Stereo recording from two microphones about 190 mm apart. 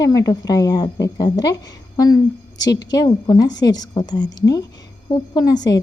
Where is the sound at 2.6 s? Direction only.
20° left (ahead or behind).